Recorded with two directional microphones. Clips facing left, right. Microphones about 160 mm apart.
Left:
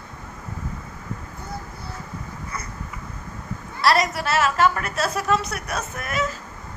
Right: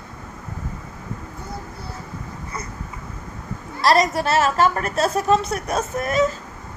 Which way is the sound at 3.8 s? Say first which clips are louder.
Right 3 dB; 40° right (ahead or behind).